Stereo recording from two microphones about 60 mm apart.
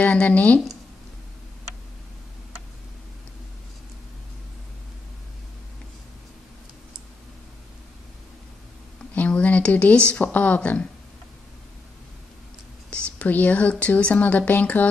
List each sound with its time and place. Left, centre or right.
0.0 s speech: left
9.1 s a sound: left
10.1 s speech: left
12.9 s speech: left